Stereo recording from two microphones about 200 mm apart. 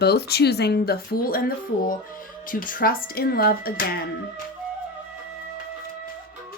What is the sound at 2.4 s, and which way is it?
Speech, 45° left (ahead or behind).